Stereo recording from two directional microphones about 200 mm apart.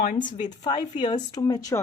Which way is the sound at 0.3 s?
35° left (ahead or behind).